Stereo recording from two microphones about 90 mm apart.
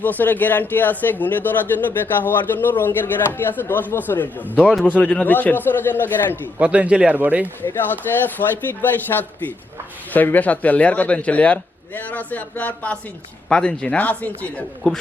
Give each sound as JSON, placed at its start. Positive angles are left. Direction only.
{"t": 0.0, "sound": "speech", "side_deg": 20}
{"t": 6.6, "sound": "speech", "side_deg": -15}
{"t": 7.4, "sound": "a man's voice", "side_deg": 25}